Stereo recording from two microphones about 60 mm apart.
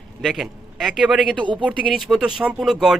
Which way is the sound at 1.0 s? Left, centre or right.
Centre.